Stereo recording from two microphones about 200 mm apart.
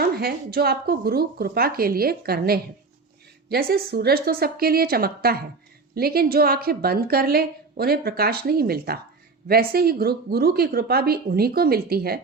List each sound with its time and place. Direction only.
0.0 s a woman's voice: 50° right (ahead or behind)